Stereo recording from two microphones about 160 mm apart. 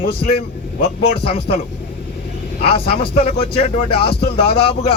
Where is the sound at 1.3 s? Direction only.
35° left (ahead or behind).